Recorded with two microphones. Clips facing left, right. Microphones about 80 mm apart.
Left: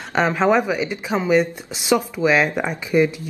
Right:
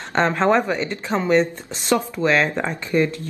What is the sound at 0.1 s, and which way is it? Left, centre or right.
Speech, centre.